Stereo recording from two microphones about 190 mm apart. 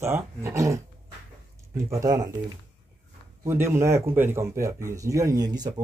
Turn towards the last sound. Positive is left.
turn(degrees=-20)  # may be behind; listen again after turning